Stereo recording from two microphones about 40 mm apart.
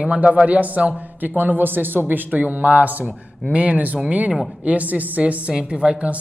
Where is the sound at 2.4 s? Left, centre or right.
Right.